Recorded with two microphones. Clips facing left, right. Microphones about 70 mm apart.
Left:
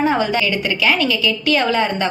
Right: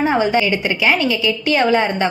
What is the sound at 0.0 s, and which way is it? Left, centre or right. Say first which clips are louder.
A woman's voice: right 1 dB; right.